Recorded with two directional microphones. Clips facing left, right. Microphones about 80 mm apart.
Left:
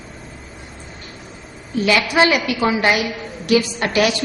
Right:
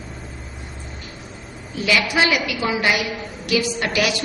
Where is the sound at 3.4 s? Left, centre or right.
Left.